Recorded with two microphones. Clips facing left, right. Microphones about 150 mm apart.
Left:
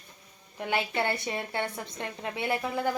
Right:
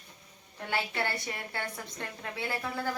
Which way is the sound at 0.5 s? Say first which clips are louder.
Left 4 dB; 15° left (ahead or behind).